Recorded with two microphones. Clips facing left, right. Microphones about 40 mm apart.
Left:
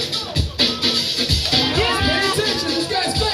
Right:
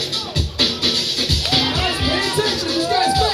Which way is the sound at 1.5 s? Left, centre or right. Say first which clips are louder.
Left 2 dB; centre.